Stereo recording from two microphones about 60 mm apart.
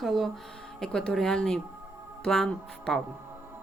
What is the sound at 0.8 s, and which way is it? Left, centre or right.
Speech, centre.